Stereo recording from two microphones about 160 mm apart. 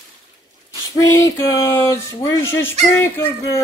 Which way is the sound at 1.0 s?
20° left (ahead or behind).